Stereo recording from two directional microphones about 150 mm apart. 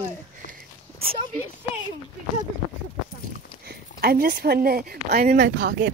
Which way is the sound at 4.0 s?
85° right.